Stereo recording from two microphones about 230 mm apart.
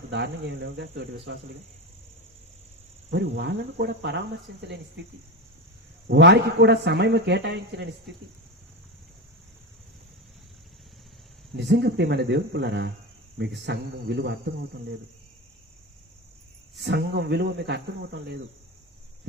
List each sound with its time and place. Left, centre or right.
0.1 s a man's voice: right
3.1 s a man's voice: right
6.1 s a man's voice: right
11.5 s a man's voice: right
16.7 s a man's voice: right